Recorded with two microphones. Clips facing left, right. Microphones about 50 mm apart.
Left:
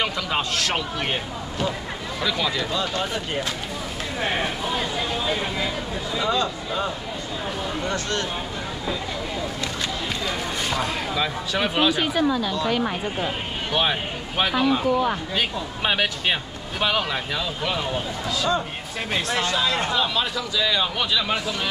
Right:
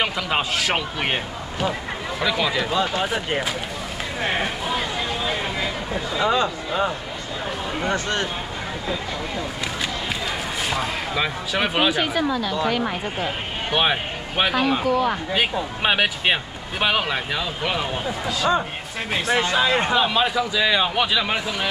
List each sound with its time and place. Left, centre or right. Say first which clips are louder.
0.0 s a man's voice: right 2 dB; centre
6.1 s a man's voice: right 3 dB; centre
10.2 s a sound: right 1 dB; centre
11.1 s speech: right 2 dB; centre
12.0 s speech: even; centre
12.8 s a man's voice: even; centre
19.3 s a man's voice: right 5 dB; centre